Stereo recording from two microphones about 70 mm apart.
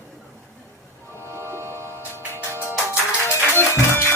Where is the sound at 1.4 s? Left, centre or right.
Right.